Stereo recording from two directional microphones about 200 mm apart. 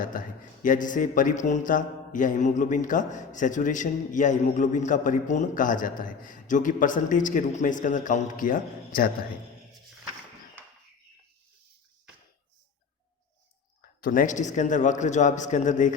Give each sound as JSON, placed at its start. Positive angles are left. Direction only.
{"t": 0.0, "sound": "speech", "side_deg": 40}
{"t": 14.0, "sound": "speech", "side_deg": 40}